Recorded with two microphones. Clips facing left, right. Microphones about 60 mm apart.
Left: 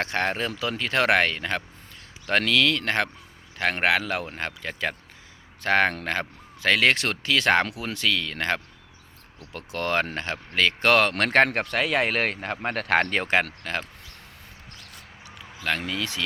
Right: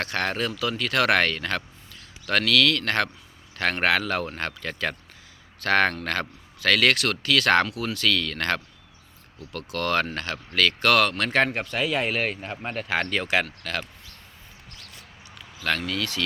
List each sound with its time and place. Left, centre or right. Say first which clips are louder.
0.0 s speech: left 1 dB; left
11.1 s speech: left 3 dB; left
13.0 s speech: right 1 dB; left
15.9 s speech: right 1 dB; centre